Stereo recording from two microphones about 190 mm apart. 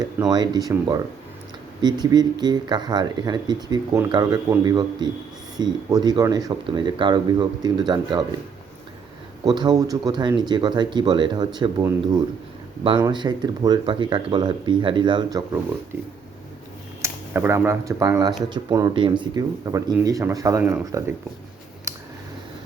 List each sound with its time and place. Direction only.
0.0 s speech: 20° right (ahead or behind)
9.4 s speech: 20° right (ahead or behind)
17.0 s speech: 15° right (ahead or behind)
21.9 s a sound: 15° right (ahead or behind)